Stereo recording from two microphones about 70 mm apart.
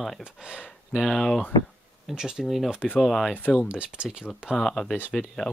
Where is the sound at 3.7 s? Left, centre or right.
Centre.